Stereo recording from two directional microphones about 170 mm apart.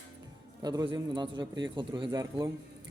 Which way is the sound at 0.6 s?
25° right (ahead or behind).